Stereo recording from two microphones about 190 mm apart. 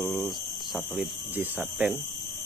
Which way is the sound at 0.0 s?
Centre (ahead or behind).